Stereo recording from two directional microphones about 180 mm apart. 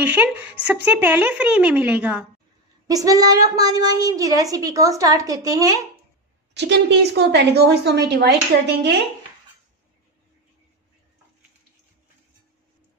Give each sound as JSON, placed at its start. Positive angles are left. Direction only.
{"t": 0.0, "sound": "a sound", "side_deg": -10}
{"t": 1.0, "sound": "a woman's voice", "side_deg": -10}
{"t": 2.9, "sound": "a child's voice", "side_deg": -20}
{"t": 6.5, "sound": "a woman's voice", "side_deg": -70}